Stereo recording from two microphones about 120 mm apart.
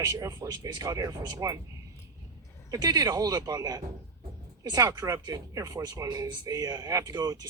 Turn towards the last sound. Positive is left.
turn(degrees=-30)  # may be behind; listen again after turning